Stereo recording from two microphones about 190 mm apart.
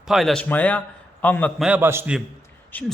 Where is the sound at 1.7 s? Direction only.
10° right (ahead or behind).